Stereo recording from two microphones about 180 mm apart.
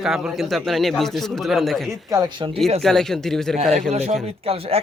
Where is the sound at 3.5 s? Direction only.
35° right (ahead or behind).